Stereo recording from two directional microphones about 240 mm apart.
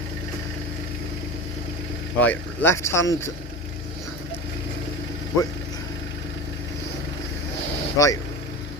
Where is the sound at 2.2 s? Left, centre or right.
Centre.